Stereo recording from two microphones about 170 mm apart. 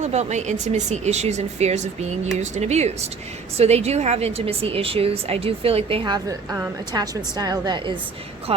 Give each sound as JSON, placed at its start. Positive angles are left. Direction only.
{"t": 0.0, "sound": "a woman's voice", "side_deg": -40}
{"t": 8.5, "sound": "speech", "side_deg": -35}